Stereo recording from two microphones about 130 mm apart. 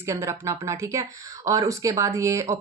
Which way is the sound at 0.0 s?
20° right (ahead or behind).